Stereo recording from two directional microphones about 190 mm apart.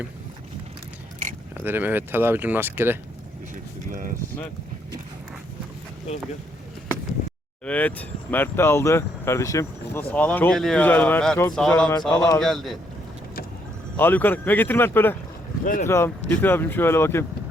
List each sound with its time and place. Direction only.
1.5 s speech: 10° right (ahead or behind)
3.5 s a sound: 45° right (ahead or behind)
7.2 s a sound: 40° left (ahead or behind)
7.6 s speech: 5° left (ahead or behind)
13.9 s speech: 10° left (ahead or behind)
15.6 s speech: 45° left (ahead or behind)
15.9 s speech: 15° left (ahead or behind)